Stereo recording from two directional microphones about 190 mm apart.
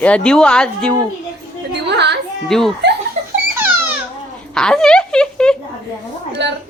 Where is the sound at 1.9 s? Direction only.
65° right (ahead or behind).